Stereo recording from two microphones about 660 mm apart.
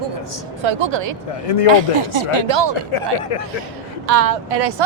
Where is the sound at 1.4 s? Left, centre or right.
Left.